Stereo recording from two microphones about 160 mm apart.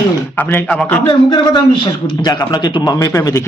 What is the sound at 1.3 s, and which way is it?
A man's voice, 30° left (ahead or behind).